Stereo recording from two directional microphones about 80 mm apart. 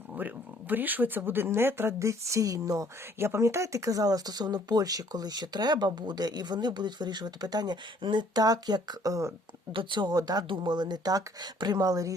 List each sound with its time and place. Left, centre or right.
0.1 s speech: right
3.2 s speech: right
9.7 s speech: right
10.4 s speech: right